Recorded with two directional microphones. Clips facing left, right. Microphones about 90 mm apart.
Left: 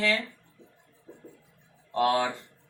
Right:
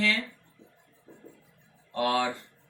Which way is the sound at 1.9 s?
25° left (ahead or behind).